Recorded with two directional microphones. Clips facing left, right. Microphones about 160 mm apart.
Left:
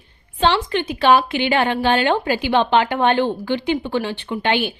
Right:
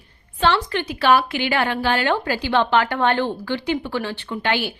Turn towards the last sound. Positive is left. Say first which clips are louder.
# left 3 dB
turn(degrees=20)  # may be behind; listen again after turning